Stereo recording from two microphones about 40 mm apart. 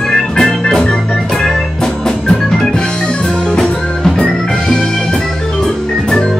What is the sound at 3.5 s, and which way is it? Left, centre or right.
Music, centre.